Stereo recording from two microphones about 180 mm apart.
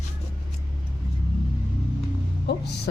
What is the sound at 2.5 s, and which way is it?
Speech, 65° left (ahead or behind).